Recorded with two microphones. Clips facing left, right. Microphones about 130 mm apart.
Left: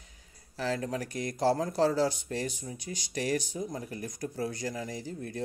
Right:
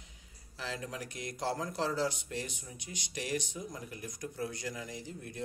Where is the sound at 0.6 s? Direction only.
45° left (ahead or behind).